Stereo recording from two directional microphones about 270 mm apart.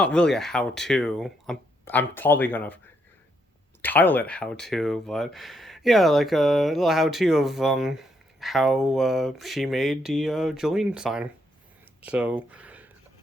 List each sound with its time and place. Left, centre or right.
0.0 s speech: centre